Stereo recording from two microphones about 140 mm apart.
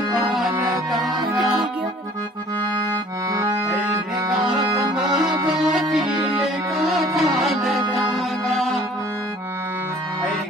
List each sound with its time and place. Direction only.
0.1 s music: centre (ahead or behind)
3.3 s accordion: 25° right (ahead or behind)
5.9 s music: centre (ahead or behind)